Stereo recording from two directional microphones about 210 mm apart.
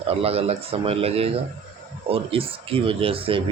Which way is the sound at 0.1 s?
30° right (ahead or behind).